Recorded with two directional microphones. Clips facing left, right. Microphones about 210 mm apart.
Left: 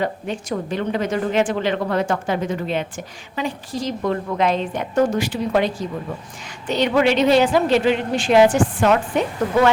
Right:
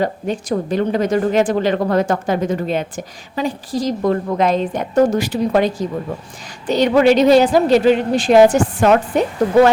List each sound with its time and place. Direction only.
0.0 s a woman's voice: 40° right (ahead or behind)